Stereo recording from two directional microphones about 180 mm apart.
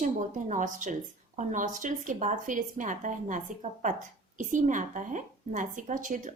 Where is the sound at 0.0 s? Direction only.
45° right (ahead or behind).